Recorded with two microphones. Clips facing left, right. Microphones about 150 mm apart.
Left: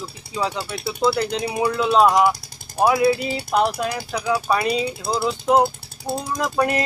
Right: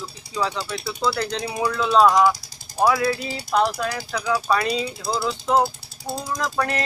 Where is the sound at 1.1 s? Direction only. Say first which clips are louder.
Left 3 dB; 10° left (ahead or behind); by 4.0 s 25° left (ahead or behind).